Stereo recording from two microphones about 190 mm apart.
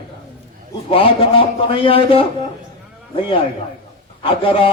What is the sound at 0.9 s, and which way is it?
A man's voice, 30° left (ahead or behind).